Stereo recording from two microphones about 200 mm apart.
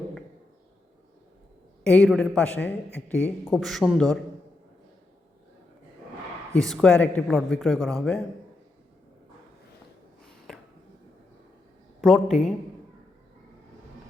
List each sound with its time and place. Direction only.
1.8 s speech: 5° left (ahead or behind)
6.6 s speech: 5° left (ahead or behind)
10.2 s a sound: centre (ahead or behind)
12.0 s speech: centre (ahead or behind)